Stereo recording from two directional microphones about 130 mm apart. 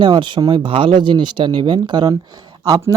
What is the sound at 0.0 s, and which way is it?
A man's voice, 35° right (ahead or behind).